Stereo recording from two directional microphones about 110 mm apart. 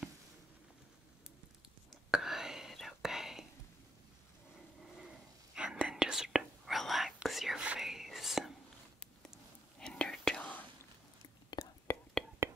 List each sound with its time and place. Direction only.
1.9 s whispering: 5° right (ahead or behind)
4.8 s whispering: 5° right (ahead or behind)
9.8 s whispering: 5° left (ahead or behind)
11.6 s whispering: 40° left (ahead or behind)